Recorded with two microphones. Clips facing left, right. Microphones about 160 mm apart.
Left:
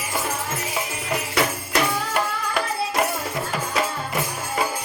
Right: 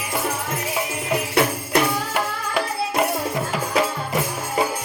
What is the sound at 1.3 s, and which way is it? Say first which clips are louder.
Music: right 3 dB; 60° right (ahead or behind).